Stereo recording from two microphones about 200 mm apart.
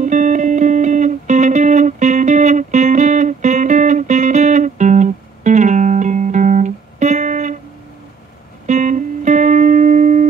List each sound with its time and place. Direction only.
0.0 s music: 40° right (ahead or behind)
8.6 s music: 35° right (ahead or behind)